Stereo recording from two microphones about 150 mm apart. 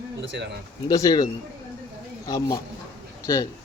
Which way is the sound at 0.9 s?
25° left (ahead or behind).